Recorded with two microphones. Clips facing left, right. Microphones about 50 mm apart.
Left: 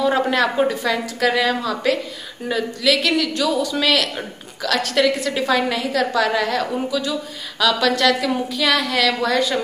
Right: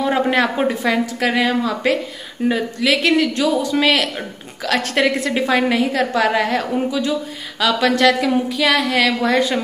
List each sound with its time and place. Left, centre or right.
0.0 s a woman's voice: right